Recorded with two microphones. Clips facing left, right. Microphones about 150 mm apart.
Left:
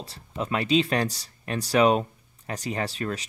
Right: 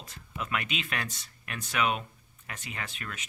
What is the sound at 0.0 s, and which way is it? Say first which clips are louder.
Speech: left 7 dB; 30° left (ahead or behind).